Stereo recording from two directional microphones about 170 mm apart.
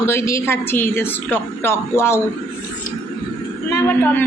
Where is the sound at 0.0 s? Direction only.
15° left (ahead or behind).